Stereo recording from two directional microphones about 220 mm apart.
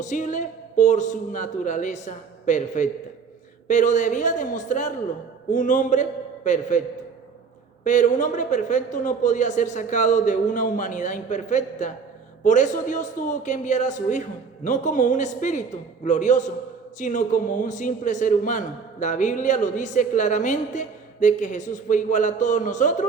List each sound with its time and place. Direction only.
0.0 s a man's voice: 35° left (ahead or behind)
7.9 s a man's voice: 35° left (ahead or behind)